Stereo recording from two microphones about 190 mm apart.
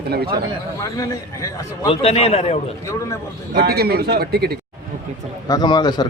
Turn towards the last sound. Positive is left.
turn(degrees=20)  # may be behind; listen again after turning